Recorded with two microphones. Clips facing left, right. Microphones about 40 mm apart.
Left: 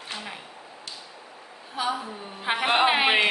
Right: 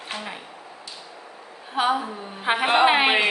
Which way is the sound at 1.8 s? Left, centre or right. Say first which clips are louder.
Right 6 dB; right.